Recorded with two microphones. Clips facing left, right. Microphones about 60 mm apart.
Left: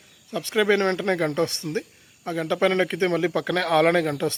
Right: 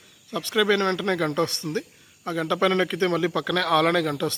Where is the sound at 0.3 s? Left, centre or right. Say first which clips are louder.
Left 1 dB; centre.